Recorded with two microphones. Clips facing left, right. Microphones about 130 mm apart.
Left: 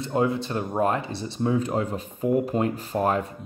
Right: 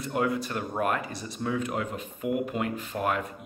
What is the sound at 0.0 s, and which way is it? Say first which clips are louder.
Speech: left 4 dB; 25° left (ahead or behind).